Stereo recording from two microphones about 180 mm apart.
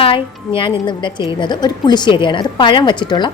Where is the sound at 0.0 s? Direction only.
30° left (ahead or behind).